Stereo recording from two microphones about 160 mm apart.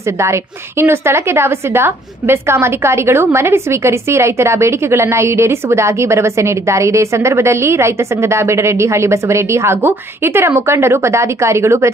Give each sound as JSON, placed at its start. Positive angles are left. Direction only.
{"t": 0.0, "sound": "a woman's voice", "side_deg": -15}